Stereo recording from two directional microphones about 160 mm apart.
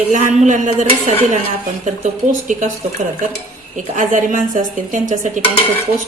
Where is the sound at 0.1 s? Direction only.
50° right (ahead or behind).